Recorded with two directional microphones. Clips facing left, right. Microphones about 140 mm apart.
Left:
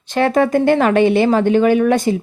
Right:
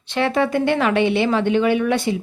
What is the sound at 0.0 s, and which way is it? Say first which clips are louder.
A woman's voice: left 5 dB; 45° left (ahead or behind).